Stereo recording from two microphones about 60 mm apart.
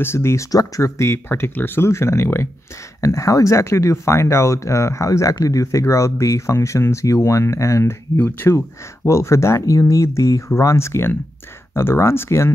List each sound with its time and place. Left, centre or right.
0.0 s speech: left
0.5 s speech: left
0.8 s speech: left
1.9 s speech: left
3.0 s speech: left
8.4 s speech: left